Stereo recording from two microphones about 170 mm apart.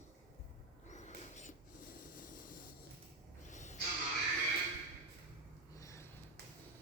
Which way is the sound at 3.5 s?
45° left (ahead or behind).